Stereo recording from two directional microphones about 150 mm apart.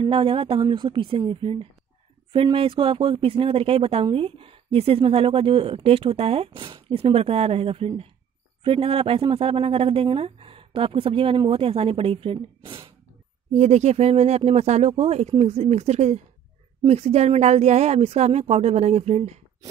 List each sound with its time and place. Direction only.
0.0 s speech: 35° right (ahead or behind)
13.6 s speech: 50° right (ahead or behind)